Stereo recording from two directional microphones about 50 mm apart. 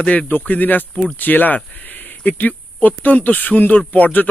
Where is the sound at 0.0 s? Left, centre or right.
Left.